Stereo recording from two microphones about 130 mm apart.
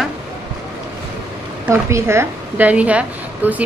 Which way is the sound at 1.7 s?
20° right (ahead or behind).